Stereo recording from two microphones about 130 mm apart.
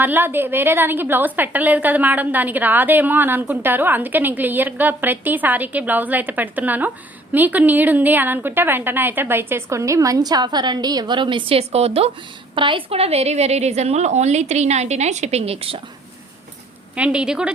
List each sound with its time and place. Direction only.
0.0 s a woman's voice: 15° right (ahead or behind); by 12.1 s 50° right (ahead or behind)
12.5 s a woman's voice: 40° right (ahead or behind)
16.9 s a woman's voice: 10° right (ahead or behind)